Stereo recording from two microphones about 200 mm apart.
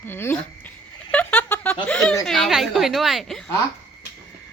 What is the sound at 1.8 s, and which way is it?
A woman's voice, 5° left (ahead or behind).